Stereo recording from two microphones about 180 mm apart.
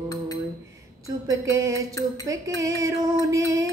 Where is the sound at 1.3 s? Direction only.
15° right (ahead or behind).